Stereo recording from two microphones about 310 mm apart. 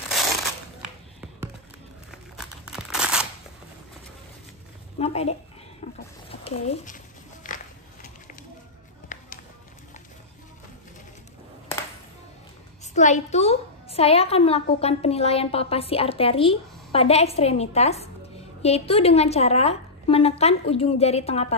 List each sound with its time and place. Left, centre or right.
2.0 s crumpling: centre
4.9 s a woman's voice: centre
9.1 s music: left
12.9 s a woman's voice: left